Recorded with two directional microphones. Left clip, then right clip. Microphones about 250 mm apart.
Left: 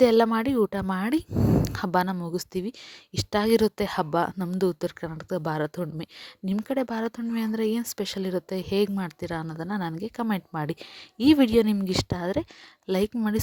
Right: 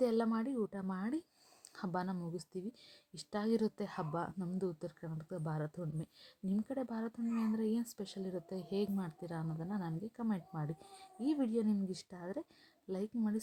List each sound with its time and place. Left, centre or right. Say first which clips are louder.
0.0 s speech: left 15 dB; left